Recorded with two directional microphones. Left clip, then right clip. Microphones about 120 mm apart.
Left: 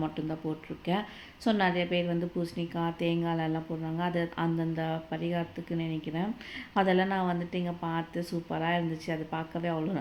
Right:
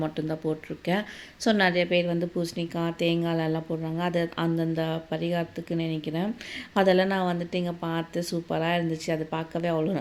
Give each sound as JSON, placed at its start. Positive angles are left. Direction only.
{"t": 0.0, "sound": "a woman's voice", "side_deg": -25}